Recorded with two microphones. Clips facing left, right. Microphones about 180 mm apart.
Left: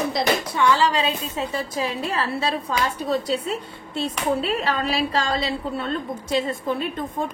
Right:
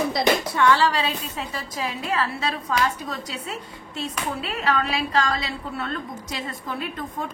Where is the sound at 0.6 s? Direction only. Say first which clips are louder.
Even; 20° left (ahead or behind).